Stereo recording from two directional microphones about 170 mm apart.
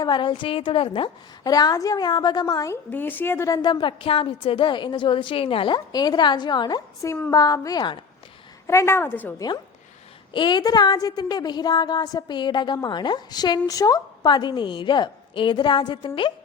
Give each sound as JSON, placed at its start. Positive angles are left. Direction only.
{"t": 0.0, "sound": "a woman's voice", "side_deg": 30}
{"t": 2.9, "sound": "a woman's voice", "side_deg": 10}
{"t": 10.3, "sound": "a woman's voice", "side_deg": 25}